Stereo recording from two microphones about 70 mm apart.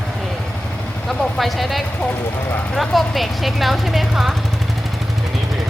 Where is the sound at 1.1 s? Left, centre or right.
Centre.